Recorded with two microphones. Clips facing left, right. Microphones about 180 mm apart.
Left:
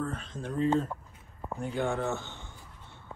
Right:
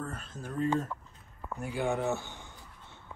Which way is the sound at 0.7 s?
25° left (ahead or behind).